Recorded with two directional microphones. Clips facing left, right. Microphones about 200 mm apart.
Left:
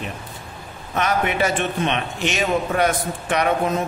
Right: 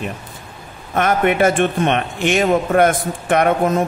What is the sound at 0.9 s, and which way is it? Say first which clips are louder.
A man's voice: right 5 dB; 50° right (ahead or behind).